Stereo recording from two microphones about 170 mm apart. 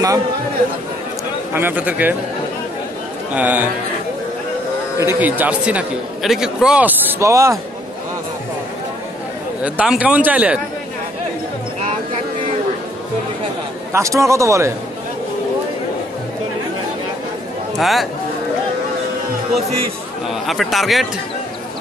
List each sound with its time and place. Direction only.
1.5 s a man's voice: 10° right (ahead or behind)
3.3 s a man's voice: 10° right (ahead or behind)
4.9 s a man's voice: 15° right (ahead or behind)
9.6 s a man's voice: 5° right (ahead or behind)
13.9 s a man's voice: 20° right (ahead or behind)
17.7 s a man's voice: centre (ahead or behind)
20.4 s a man's voice: centre (ahead or behind)